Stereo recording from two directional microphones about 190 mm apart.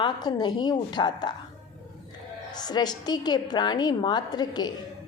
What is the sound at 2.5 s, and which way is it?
A woman's voice, 20° left (ahead or behind).